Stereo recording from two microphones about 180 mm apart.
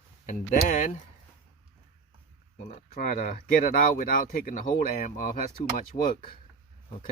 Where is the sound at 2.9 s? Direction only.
55° left (ahead or behind).